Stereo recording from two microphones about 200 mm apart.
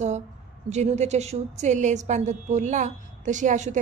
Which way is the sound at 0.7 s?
35° right (ahead or behind).